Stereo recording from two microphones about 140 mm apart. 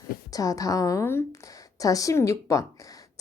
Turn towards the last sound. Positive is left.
turn(degrees=25)  # may be behind; listen again after turning